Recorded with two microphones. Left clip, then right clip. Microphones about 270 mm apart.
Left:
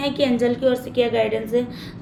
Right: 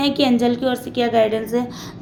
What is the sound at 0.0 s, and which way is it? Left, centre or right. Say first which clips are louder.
A woman's voice: right 2 dB; centre.